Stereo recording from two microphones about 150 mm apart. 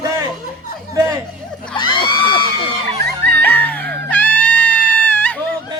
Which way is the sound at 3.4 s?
10° left (ahead or behind).